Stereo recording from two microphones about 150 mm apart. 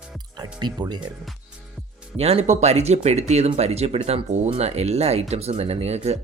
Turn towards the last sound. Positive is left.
turn(degrees=-45)  # may be behind; listen again after turning